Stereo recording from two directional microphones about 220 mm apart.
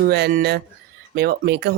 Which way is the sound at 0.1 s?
45° right (ahead or behind).